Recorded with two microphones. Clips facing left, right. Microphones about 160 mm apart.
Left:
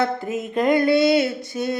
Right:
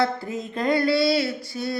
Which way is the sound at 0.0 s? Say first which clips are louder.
Left 2 dB; 20° left (ahead or behind).